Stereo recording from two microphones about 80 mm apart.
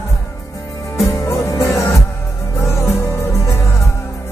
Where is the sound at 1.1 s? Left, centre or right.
Left.